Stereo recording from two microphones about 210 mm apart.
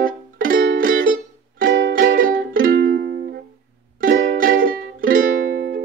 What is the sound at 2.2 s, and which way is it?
Music, 40° right (ahead or behind).